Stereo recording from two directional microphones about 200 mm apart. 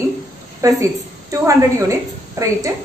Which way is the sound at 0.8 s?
15° right (ahead or behind).